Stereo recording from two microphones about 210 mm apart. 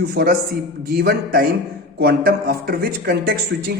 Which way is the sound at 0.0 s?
50° right (ahead or behind).